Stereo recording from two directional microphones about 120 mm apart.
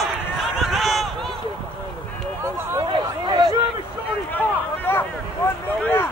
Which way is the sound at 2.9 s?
40° right (ahead or behind).